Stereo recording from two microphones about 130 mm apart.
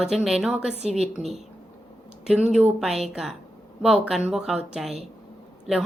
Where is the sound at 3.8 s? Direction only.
5° right (ahead or behind).